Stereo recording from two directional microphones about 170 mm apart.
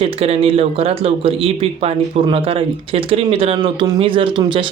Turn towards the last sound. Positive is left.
turn(degrees=-30)  # may be behind; listen again after turning